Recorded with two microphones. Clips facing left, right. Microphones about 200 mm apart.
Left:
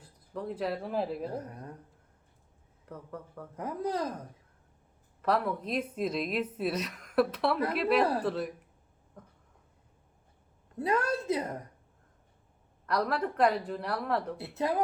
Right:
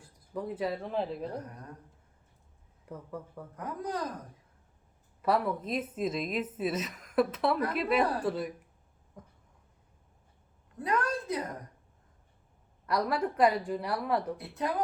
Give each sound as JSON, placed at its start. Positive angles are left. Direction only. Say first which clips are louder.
{"t": 0.5, "sound": "a woman's voice", "louder": "left 1 dB", "side_deg": 0}
{"t": 2.9, "sound": "a woman's voice", "louder": "right 1 dB", "side_deg": -10}
{"t": 3.6, "sound": "speech", "louder": "left 3 dB", "side_deg": 25}
{"t": 5.2, "sound": "a woman's voice", "louder": "right 1 dB", "side_deg": -5}
{"t": 10.8, "sound": "a woman's voice", "louder": "left 2 dB", "side_deg": 25}
{"t": 12.8, "sound": "a woman's voice", "louder": "even", "side_deg": -5}
{"t": 14.3, "sound": "speech", "louder": "left 2 dB", "side_deg": 25}